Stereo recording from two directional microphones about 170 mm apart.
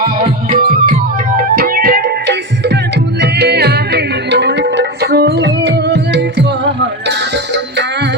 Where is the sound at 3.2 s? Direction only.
75° right (ahead or behind); by 6.7 s 90° right.